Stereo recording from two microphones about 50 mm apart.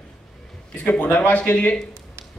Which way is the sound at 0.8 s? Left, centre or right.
Left.